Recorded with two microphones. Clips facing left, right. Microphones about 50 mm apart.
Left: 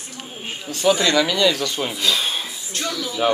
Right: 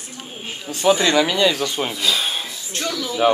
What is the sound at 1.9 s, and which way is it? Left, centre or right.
Speech, centre.